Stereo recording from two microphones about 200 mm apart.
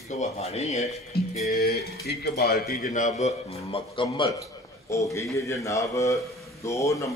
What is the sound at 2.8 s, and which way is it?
Speech, 40° left (ahead or behind).